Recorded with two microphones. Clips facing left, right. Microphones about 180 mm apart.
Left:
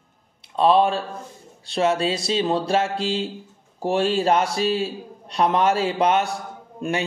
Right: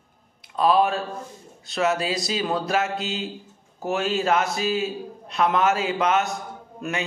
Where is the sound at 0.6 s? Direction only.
30° left (ahead or behind).